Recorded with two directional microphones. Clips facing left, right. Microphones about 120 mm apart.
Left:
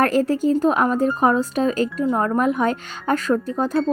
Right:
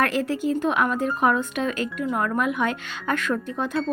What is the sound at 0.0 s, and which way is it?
A woman's voice, 40° left (ahead or behind).